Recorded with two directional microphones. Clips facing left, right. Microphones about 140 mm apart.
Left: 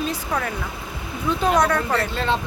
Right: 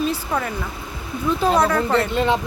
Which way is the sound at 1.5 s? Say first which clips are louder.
Even; 5° right (ahead or behind).